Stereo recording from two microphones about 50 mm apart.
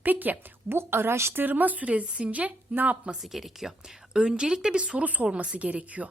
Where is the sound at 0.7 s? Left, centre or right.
Right.